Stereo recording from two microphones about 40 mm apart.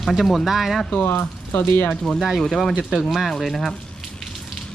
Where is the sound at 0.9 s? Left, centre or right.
Left.